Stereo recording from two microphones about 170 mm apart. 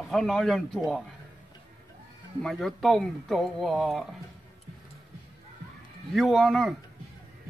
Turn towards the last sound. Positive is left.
turn(degrees=0)  # may be behind; listen again after turning